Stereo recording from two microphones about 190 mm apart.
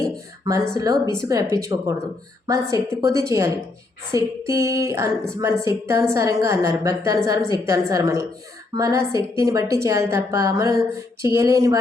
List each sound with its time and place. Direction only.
0.4 s a woman's voice: 15° right (ahead or behind)